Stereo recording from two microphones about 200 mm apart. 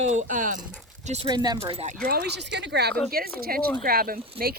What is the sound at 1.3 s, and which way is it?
Speech, 20° right (ahead or behind).